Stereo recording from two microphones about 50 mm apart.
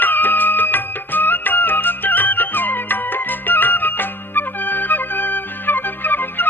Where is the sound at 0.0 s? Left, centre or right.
Left.